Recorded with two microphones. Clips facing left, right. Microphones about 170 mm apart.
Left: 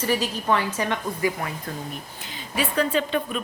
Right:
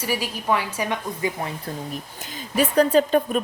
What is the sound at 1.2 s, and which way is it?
Speech, 25° right (ahead or behind).